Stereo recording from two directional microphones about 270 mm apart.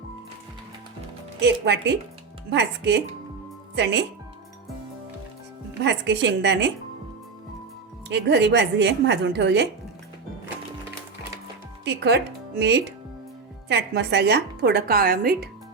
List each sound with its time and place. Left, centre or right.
1.4 s a woman's voice: right
5.8 s a woman's voice: right
8.1 s a woman's voice: right
11.9 s a woman's voice: right